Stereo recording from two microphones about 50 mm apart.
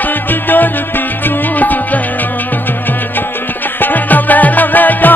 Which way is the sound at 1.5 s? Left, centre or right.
Left.